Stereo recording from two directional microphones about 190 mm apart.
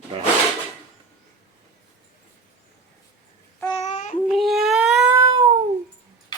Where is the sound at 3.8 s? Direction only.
40° left (ahead or behind).